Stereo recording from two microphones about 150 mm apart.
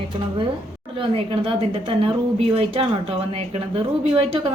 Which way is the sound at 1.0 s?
35° right (ahead or behind).